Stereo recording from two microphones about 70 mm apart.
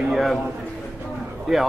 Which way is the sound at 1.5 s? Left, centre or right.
Centre.